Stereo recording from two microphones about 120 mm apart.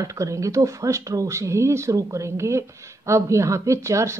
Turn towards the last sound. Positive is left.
turn(degrees=-25)  # may be behind; listen again after turning